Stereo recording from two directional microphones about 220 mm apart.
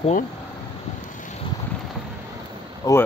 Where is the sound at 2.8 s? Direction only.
15° left (ahead or behind).